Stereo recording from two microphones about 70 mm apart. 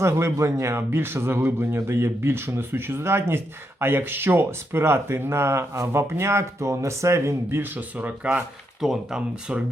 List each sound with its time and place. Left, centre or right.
0.0 s a man's voice: right
7.6 s speech: right
8.8 s speech: centre